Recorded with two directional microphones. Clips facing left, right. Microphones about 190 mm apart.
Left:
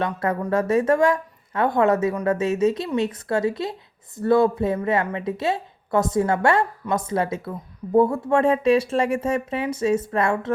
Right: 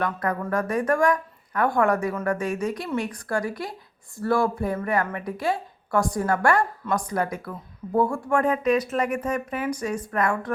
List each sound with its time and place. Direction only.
0.0 s a woman's voice: 25° left (ahead or behind)